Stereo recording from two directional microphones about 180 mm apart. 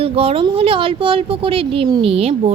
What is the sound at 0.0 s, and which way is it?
Speech, 30° right (ahead or behind).